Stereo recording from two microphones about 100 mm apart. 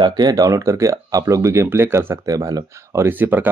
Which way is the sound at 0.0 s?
40° right (ahead or behind).